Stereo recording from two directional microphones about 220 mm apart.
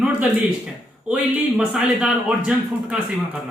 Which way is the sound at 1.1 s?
5° right (ahead or behind).